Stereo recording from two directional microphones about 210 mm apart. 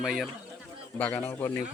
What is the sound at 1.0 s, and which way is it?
Speech, 10° left (ahead or behind).